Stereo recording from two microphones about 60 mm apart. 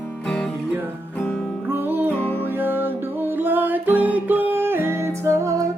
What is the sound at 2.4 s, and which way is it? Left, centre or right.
Music, right.